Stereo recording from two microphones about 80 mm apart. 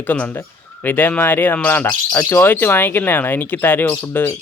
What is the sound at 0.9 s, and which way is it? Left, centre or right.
Speech, left.